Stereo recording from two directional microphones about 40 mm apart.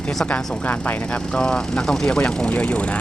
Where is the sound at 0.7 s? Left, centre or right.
Left.